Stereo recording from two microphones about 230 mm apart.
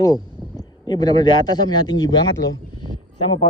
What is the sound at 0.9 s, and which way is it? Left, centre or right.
Speech, centre.